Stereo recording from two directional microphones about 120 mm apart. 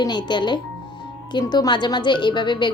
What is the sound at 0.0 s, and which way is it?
A woman's voice, 35° left (ahead or behind).